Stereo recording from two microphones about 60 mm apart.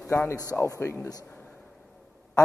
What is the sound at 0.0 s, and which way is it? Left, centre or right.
Speech, left.